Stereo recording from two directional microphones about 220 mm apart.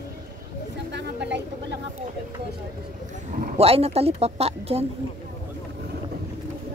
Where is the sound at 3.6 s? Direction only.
25° right (ahead or behind).